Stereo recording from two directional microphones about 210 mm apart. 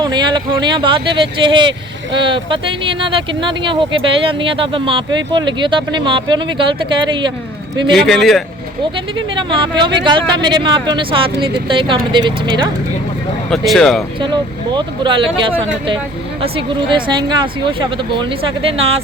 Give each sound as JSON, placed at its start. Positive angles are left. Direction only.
{"t": 0.0, "sound": "speech", "side_deg": -20}
{"t": 7.9, "sound": "speech", "side_deg": 0}
{"t": 8.8, "sound": "speech", "side_deg": -25}
{"t": 13.5, "sound": "speech", "side_deg": 0}
{"t": 14.2, "sound": "speech", "side_deg": -20}